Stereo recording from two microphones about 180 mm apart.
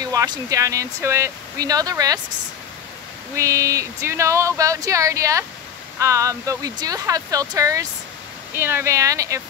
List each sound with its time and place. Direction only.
0.0 s speech: 20° right (ahead or behind)
3.3 s speech: 15° right (ahead or behind)